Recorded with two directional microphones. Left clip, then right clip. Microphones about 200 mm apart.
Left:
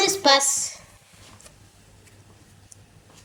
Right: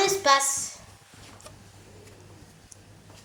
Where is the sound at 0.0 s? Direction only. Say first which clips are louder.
Left 3 dB; 55° left (ahead or behind).